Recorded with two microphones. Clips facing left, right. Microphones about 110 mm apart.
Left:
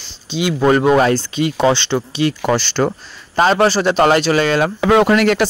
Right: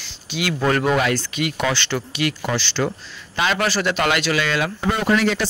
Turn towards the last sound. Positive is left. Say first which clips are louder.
# left 6 dB
turn(degrees=65)  # may be behind; listen again after turning